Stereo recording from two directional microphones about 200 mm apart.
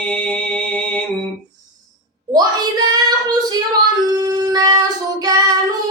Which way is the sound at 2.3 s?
20° right (ahead or behind).